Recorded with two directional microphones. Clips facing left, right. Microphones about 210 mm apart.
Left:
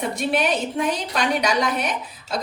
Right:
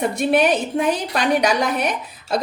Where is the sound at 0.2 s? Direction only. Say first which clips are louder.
Right 6 dB; 50° right (ahead or behind).